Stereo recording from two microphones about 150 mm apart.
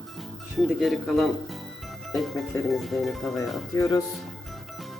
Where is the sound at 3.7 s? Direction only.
20° left (ahead or behind).